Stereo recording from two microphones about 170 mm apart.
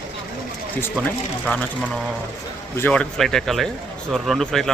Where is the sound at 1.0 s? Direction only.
10° left (ahead or behind).